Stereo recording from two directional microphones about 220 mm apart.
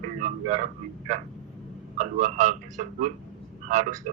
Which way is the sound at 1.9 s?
35° right (ahead or behind).